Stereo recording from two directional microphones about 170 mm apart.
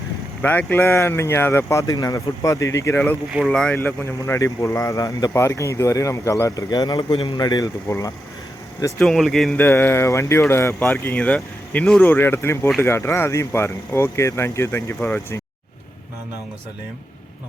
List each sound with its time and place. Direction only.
0.4 s speech: 10° left (ahead or behind)
3.3 s speech: centre (ahead or behind); by 8.1 s 20° left (ahead or behind)
9.0 s speech: centre (ahead or behind)